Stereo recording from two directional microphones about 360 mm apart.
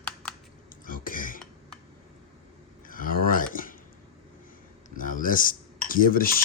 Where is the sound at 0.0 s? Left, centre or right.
Centre.